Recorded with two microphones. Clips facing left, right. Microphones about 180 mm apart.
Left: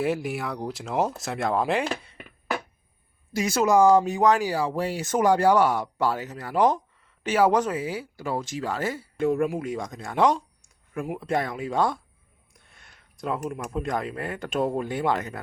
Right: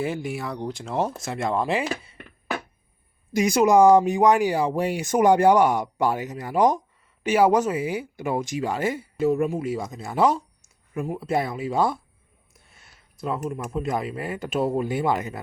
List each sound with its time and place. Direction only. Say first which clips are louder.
0.0 s speech: left 1 dB; centre (ahead or behind)
3.3 s speech: right 3 dB; 15° right (ahead or behind)
9.1 s speech: right 1 dB; 5° right (ahead or behind)